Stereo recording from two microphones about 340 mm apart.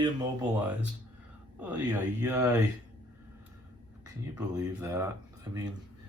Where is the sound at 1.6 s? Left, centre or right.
Centre.